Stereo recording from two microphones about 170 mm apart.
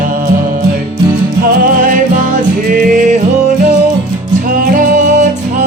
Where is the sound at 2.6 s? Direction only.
55° right (ahead or behind).